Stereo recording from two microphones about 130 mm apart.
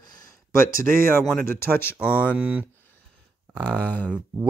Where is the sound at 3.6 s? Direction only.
10° left (ahead or behind).